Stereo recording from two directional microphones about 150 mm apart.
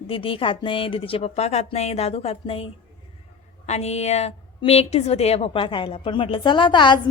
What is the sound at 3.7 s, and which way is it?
A woman's voice, 45° left (ahead or behind).